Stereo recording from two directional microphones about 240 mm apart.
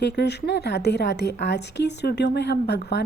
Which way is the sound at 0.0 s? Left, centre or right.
Left.